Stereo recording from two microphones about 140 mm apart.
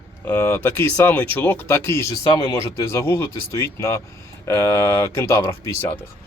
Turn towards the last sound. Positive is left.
turn(degrees=20)  # may be behind; listen again after turning